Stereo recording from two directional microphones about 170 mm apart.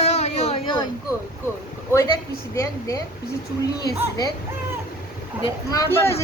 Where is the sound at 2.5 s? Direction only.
20° left (ahead or behind).